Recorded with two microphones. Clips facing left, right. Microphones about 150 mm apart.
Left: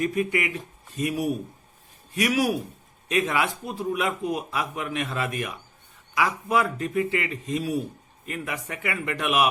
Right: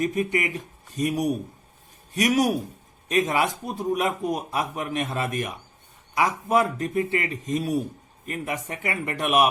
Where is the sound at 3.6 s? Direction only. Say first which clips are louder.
Right 2 dB; 45° right (ahead or behind).